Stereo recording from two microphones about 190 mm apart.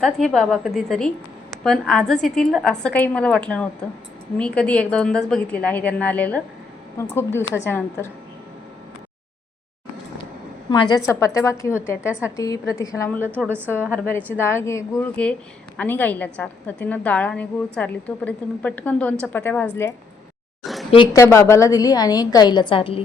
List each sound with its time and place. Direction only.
0.0 s a woman's voice: centre (ahead or behind)
10.7 s a woman's voice: 20° left (ahead or behind)
13.4 s a woman's voice: 10° right (ahead or behind)
13.9 s a woman's voice: 10° left (ahead or behind)
20.6 s a sound: centre (ahead or behind)
20.9 s a woman's voice: 20° left (ahead or behind)